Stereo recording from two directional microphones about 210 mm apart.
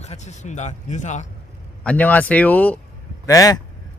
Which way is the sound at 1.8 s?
5° left (ahead or behind).